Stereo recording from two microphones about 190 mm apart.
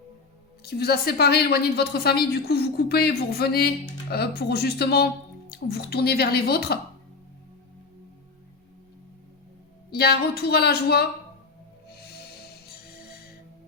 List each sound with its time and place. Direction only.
0.6 s a woman's voice: 55° left (ahead or behind)
9.9 s a woman's voice: 55° left (ahead or behind)
11.9 s music: 60° left (ahead or behind)